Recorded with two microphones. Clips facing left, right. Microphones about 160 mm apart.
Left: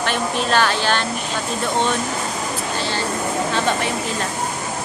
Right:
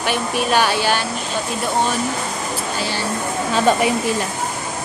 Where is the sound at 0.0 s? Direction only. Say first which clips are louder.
Right 1 dB; 10° right (ahead or behind).